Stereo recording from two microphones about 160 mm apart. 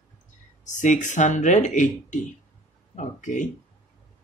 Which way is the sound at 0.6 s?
50° left (ahead or behind).